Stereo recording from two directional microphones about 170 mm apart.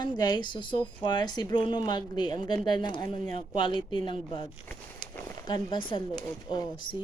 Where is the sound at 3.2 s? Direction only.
45° right (ahead or behind).